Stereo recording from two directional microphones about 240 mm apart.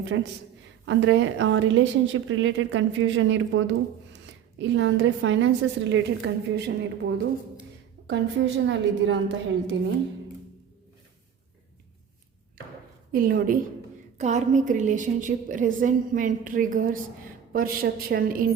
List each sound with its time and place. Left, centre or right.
0.0 s a woman's voice: right
13.1 s a woman's voice: right